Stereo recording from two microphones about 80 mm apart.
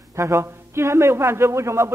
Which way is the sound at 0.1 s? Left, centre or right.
Right.